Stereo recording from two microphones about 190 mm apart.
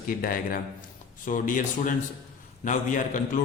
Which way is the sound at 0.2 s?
50° left (ahead or behind).